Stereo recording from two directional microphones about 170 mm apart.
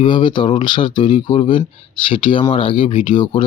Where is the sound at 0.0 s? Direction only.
30° left (ahead or behind).